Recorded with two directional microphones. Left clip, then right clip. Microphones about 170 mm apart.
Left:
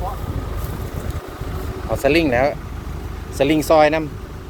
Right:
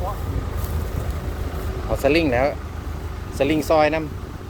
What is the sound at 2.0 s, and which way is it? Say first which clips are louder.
Speech: left 2 dB; 5° left (ahead or behind).